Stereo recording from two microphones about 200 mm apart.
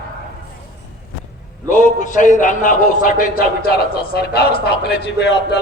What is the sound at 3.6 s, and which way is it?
A man's voice, 50° left (ahead or behind).